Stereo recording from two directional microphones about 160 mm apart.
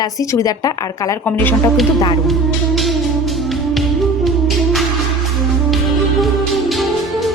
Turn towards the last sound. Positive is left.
turn(degrees=0)  # may be behind; listen again after turning